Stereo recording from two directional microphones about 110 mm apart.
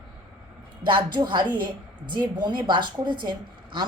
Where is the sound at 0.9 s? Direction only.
45° right (ahead or behind).